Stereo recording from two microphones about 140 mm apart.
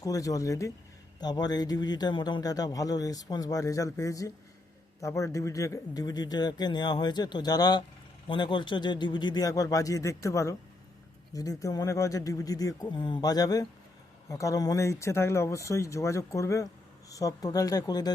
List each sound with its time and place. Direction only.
0.0 s a man's voice: 25° left (ahead or behind)